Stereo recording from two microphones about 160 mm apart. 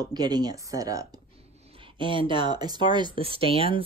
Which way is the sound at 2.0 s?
30° right (ahead or behind).